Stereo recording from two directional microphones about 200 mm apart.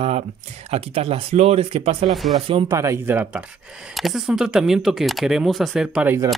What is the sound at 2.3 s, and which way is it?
Speech, 30° right (ahead or behind).